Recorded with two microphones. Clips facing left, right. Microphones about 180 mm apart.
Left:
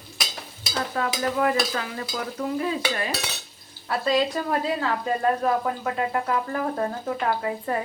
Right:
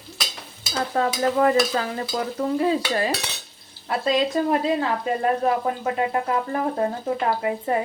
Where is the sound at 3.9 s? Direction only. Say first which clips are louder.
Right 1 dB; 25° right (ahead or behind).